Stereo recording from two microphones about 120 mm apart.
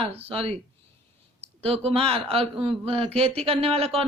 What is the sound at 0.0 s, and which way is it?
Speech, 55° right (ahead or behind).